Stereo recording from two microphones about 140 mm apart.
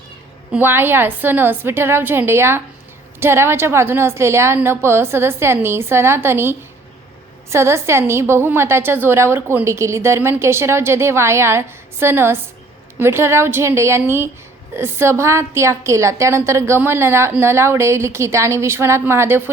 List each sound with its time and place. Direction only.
0.5 s a woman's voice: 15° right (ahead or behind)